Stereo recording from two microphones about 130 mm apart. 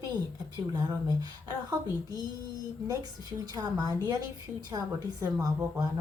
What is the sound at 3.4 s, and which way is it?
A woman's voice, 30° right (ahead or behind).